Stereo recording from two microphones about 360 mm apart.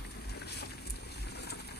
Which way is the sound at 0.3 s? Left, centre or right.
Left.